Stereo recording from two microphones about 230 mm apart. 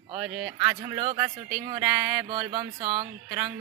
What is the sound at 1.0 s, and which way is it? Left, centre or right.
Speech, right.